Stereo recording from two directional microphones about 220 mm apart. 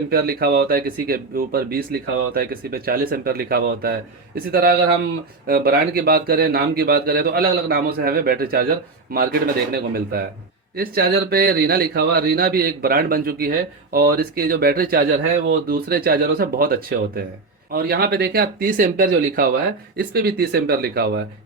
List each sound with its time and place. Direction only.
0.1 s speech: 45° right (ahead or behind)